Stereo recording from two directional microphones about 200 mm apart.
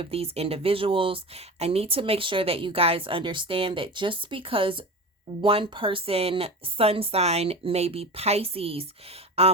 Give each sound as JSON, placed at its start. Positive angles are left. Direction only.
{"t": 0.0, "sound": "speech", "side_deg": -30}